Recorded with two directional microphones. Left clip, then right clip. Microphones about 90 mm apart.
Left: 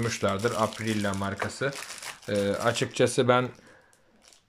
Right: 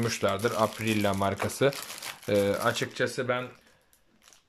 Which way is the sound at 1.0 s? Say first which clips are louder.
Right 4 dB; 30° right (ahead or behind).